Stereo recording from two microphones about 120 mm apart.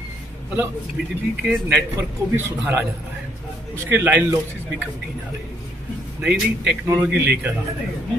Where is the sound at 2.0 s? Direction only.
15° right (ahead or behind).